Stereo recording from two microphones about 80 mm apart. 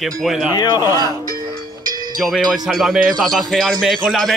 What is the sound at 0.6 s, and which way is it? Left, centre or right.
Speech, left.